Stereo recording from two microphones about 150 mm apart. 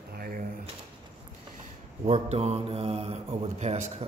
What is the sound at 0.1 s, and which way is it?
Drawer open or close, 85° right.